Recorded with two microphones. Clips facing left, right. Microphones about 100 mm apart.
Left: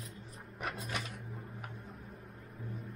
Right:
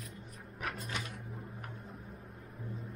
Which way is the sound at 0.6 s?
Centre (ahead or behind).